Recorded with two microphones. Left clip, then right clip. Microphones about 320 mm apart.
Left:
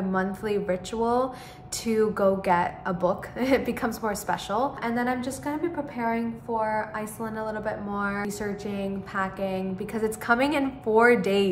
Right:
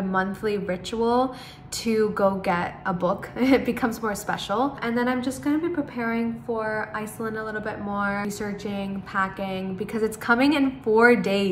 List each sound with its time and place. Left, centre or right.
0.1 s a woman's voice: centre